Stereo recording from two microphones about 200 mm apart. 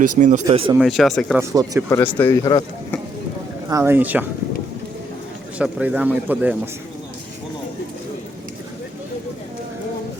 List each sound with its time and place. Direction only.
0.0 s speech: 40° right (ahead or behind)
0.4 s speech: 25° right (ahead or behind)
0.8 s speech: centre (ahead or behind)
1.4 s speech: 15° right (ahead or behind)
1.9 s speech: 10° left (ahead or behind)
3.7 s speech: 15° right (ahead or behind)
5.5 s speech: 5° right (ahead or behind)